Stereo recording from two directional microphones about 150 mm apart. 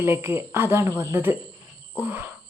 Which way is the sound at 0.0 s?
15° right (ahead or behind).